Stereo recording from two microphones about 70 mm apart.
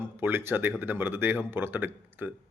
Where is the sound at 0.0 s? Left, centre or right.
Right.